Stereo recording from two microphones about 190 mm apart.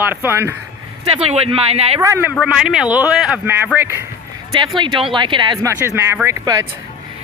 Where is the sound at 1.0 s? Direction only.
30° right (ahead or behind).